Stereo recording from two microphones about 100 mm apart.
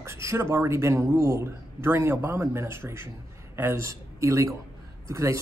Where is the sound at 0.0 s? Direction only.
30° right (ahead or behind).